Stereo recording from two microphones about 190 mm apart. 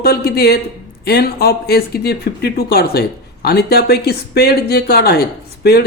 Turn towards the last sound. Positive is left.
turn(degrees=55)  # may be behind; listen again after turning